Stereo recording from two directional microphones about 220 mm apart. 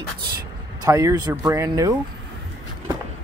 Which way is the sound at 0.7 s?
15° right (ahead or behind).